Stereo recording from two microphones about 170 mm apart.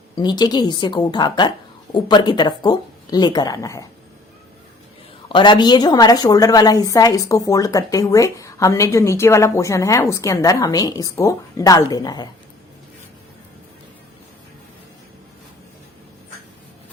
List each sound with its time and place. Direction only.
0.2 s a woman's voice: 25° left (ahead or behind)
5.3 s a woman's voice: 25° left (ahead or behind)